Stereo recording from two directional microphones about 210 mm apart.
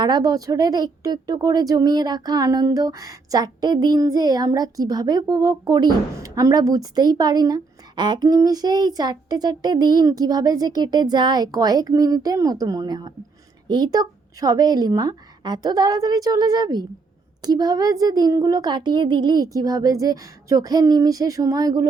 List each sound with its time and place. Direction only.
0.0 s a woman's voice: 20° right (ahead or behind)